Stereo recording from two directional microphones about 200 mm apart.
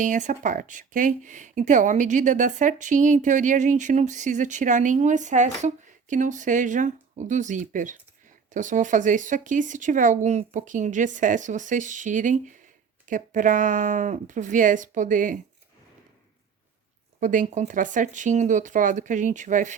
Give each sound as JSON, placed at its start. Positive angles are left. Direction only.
{"t": 0.0, "sound": "speech", "side_deg": -40}
{"t": 17.2, "sound": "speech", "side_deg": -40}